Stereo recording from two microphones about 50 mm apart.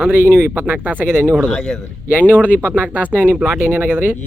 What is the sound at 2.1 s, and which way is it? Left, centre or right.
Speech, right.